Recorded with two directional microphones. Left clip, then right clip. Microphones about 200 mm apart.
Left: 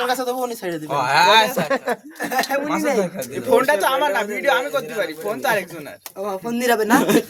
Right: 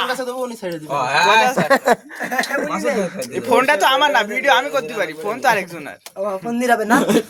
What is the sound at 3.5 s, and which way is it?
Speech, 30° right (ahead or behind).